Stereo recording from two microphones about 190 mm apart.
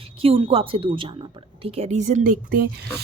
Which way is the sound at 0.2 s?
30° right (ahead or behind).